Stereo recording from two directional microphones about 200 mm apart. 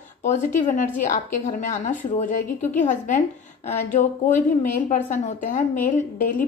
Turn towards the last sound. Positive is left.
turn(degrees=40)  # may be behind; listen again after turning